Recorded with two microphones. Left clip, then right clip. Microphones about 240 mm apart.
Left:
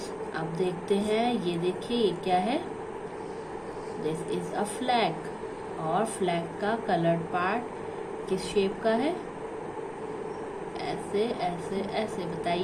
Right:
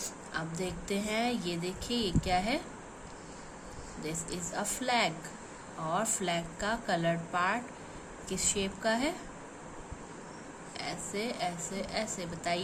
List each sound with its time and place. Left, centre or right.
0.6 s speech: right
4.5 s speech: right
8.6 s speech: right
10.8 s speech: right